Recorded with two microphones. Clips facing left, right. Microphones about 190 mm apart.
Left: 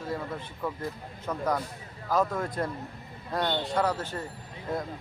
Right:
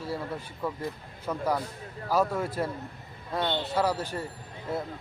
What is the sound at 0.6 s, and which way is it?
Speech, 10° right (ahead or behind).